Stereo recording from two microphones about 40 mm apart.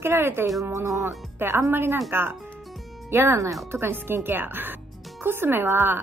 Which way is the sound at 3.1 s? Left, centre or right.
Right.